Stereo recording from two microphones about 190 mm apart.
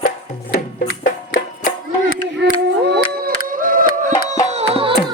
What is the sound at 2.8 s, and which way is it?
Chop, 60° right (ahead or behind).